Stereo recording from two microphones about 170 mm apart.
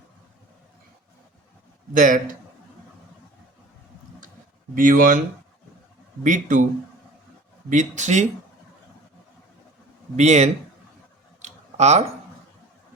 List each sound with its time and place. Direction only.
1.9 s speech: 50° right (ahead or behind)
4.7 s speech: 55° right (ahead or behind)
6.2 s speech: 50° right (ahead or behind)
7.7 s speech: 45° right (ahead or behind)
10.2 s speech: 40° right (ahead or behind)
11.4 s a sound: 40° right (ahead or behind)